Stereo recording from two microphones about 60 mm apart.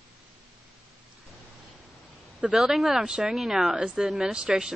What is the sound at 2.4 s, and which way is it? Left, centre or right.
Speech, centre.